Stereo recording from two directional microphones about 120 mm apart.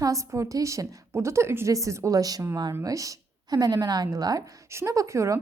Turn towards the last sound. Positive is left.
turn(degrees=-25)  # may be behind; listen again after turning